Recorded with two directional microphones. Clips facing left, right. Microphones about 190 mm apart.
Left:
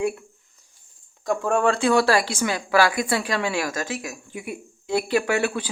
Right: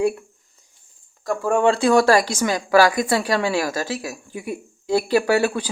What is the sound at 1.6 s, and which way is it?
Speech, 30° right (ahead or behind).